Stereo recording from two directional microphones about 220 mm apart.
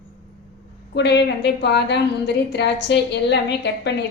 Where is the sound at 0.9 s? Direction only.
50° left (ahead or behind).